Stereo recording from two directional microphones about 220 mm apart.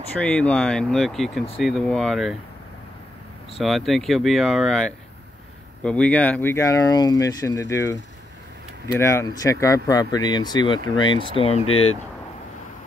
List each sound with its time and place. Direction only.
0.2 s speech: 5° left (ahead or behind)
3.5 s speech: centre (ahead or behind)
9.0 s speech: 15° left (ahead or behind)
11.6 s speech: 70° left (ahead or behind)